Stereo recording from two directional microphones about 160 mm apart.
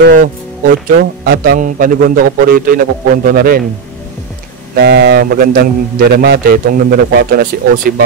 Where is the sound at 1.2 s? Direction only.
70° right (ahead or behind).